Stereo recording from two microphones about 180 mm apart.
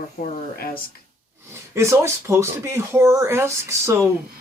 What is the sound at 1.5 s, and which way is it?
Speech, 15° right (ahead or behind).